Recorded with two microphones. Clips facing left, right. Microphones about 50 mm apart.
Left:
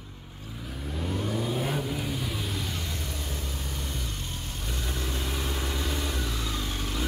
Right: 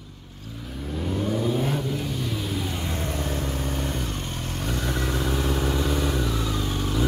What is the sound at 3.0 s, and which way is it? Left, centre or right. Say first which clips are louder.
Vehicle: right 8 dB; right.